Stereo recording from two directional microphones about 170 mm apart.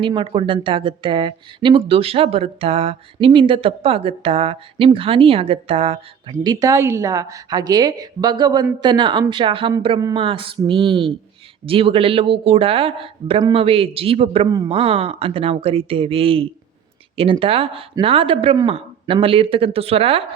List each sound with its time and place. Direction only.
0.0 s speech: 30° right (ahead or behind)
6.4 s a woman's voice: 20° right (ahead or behind)
14.7 s speech: 35° right (ahead or behind)